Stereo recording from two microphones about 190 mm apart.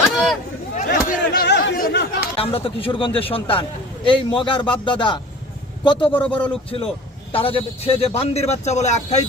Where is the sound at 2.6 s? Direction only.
25° left (ahead or behind).